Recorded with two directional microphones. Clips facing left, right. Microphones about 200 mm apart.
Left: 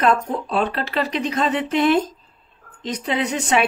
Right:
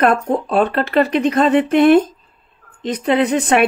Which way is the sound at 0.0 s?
55° right (ahead or behind).